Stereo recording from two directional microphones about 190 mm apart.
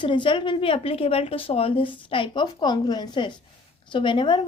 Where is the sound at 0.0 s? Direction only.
25° left (ahead or behind).